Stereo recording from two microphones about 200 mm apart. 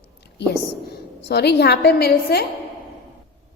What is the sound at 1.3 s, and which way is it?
A woman's voice, 55° left (ahead or behind).